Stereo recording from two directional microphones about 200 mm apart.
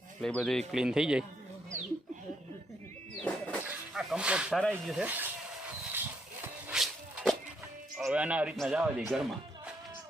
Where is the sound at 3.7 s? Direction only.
5° right (ahead or behind).